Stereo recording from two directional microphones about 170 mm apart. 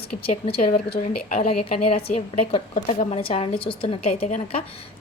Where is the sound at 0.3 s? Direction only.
35° left (ahead or behind).